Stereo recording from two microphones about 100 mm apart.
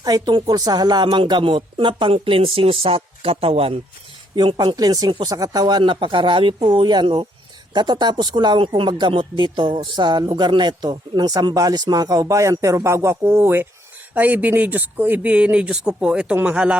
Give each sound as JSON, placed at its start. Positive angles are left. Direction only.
{"t": 0.0, "sound": "speech", "side_deg": -40}
{"t": 4.4, "sound": "speech", "side_deg": -50}
{"t": 5.8, "sound": "speech", "side_deg": -55}